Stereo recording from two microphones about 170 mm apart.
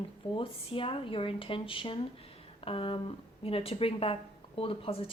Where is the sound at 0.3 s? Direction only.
30° left (ahead or behind).